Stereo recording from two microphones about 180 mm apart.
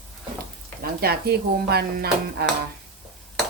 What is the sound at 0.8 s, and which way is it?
Speech, 60° right (ahead or behind).